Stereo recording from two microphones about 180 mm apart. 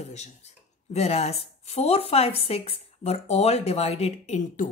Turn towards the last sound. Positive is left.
turn(degrees=45)  # may be behind; listen again after turning